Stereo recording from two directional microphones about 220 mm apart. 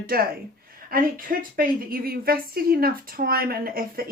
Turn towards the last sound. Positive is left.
turn(degrees=-40)  # may be behind; listen again after turning